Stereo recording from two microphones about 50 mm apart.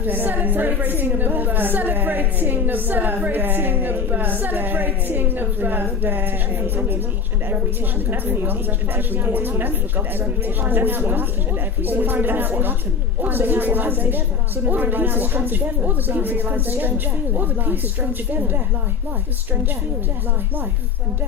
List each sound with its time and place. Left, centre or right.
0.0 s a woman's voice: right
8.1 s a woman's voice: right